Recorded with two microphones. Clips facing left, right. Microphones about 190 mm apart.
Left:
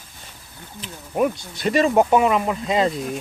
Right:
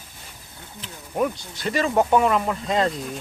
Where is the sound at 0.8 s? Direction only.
15° left (ahead or behind).